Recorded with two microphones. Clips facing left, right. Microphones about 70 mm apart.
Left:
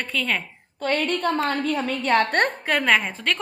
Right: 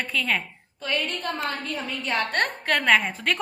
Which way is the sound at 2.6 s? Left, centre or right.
Centre.